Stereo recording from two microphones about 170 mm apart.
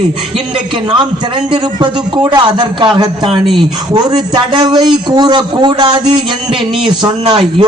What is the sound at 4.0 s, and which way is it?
A man's voice, 25° right (ahead or behind).